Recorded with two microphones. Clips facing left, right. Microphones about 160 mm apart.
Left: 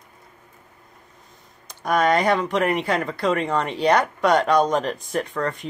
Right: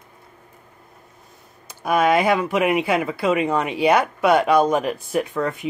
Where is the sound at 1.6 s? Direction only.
5° right (ahead or behind).